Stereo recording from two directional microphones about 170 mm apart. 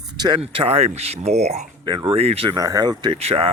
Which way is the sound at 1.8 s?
25° right (ahead or behind).